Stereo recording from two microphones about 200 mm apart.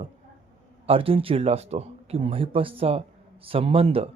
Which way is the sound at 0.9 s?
30° right (ahead or behind).